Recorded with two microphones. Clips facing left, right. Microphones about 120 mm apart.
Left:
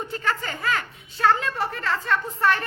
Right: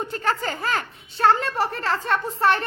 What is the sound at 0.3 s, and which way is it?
A woman's voice, 35° right (ahead or behind).